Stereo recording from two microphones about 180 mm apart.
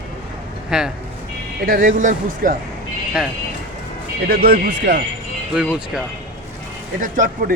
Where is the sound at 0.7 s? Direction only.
5° right (ahead or behind).